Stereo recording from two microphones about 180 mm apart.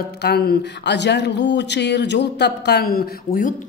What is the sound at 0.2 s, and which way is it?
A woman's voice, 60° left (ahead or behind).